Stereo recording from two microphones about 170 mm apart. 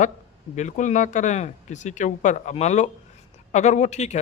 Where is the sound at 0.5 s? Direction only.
45° left (ahead or behind).